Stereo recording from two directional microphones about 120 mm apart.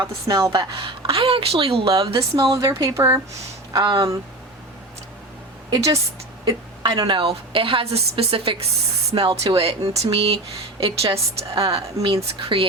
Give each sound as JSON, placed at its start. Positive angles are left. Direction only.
{"t": 0.0, "sound": "speech", "side_deg": -30}
{"t": 0.8, "sound": "a woman's voice", "side_deg": -50}
{"t": 2.1, "sound": "a woman's voice", "side_deg": -25}
{"t": 3.7, "sound": "speech", "side_deg": -35}
{"t": 5.7, "sound": "a woman's voice", "side_deg": -25}
{"t": 6.4, "sound": "a sound", "side_deg": -30}
{"t": 7.1, "sound": "a woman's voice", "side_deg": -45}
{"t": 11.6, "sound": "speech", "side_deg": -35}
{"t": 12.4, "sound": "a woman's voice", "side_deg": -50}